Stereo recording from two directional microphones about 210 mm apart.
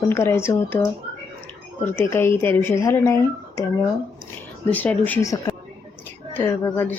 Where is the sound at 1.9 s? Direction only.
10° left (ahead or behind).